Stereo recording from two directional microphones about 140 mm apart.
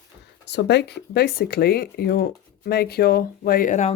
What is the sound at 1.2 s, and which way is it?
Speech, 90° left.